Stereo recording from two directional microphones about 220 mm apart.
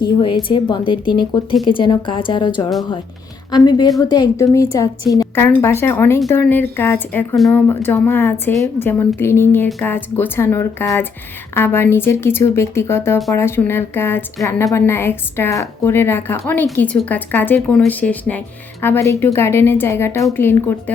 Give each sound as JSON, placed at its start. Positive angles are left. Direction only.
{"t": 0.0, "sound": "a woman's voice", "side_deg": 20}